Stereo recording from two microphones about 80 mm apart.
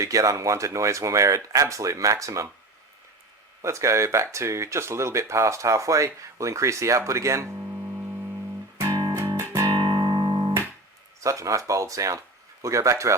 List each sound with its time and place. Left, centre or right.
0.0 s speech: right
3.6 s speech: right
8.9 s music: right
9.1 s music: right
9.6 s music: right
11.2 s speech: right